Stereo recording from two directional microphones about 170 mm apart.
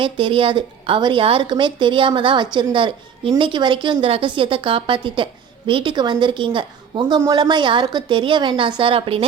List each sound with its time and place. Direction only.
0.0 s a woman's voice: 30° right (ahead or behind)